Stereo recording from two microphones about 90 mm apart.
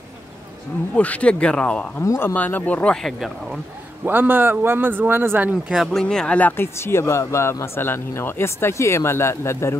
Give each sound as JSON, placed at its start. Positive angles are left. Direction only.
{"t": 0.9, "sound": "speech", "side_deg": 15}
{"t": 2.0, "sound": "speech", "side_deg": 25}
{"t": 4.0, "sound": "speech", "side_deg": -20}
{"t": 5.7, "sound": "speech", "side_deg": 0}
{"t": 6.5, "sound": "speech", "side_deg": 25}